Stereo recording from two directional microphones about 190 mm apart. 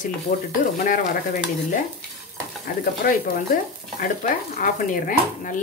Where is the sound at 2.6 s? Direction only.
50° left (ahead or behind).